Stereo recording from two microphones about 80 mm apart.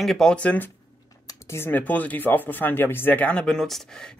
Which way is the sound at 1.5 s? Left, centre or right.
Left.